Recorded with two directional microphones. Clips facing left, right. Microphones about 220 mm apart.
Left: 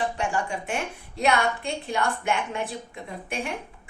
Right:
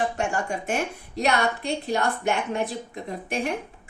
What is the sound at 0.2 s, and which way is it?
A woman's voice, 45° right (ahead or behind).